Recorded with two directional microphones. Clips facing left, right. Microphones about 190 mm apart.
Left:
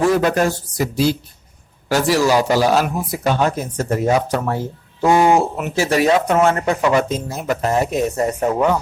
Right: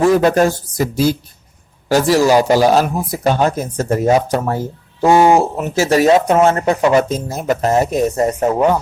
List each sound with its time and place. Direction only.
0.2 s speech: 35° right (ahead or behind)
5.7 s speech: 40° right (ahead or behind)
6.2 s speech: 25° right (ahead or behind)